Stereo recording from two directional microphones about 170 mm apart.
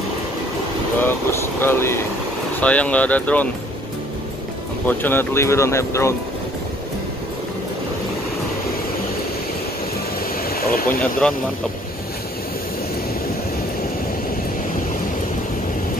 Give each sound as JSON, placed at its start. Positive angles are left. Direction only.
{"t": 1.0, "sound": "speech", "side_deg": 15}
{"t": 4.8, "sound": "speech", "side_deg": 10}
{"t": 10.5, "sound": "vehicle", "side_deg": 60}
{"t": 11.0, "sound": "speech", "side_deg": 5}